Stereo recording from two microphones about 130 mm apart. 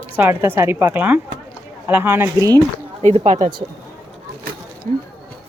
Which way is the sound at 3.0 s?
65° right (ahead or behind).